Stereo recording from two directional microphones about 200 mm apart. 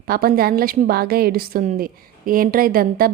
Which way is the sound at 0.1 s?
50° right (ahead or behind).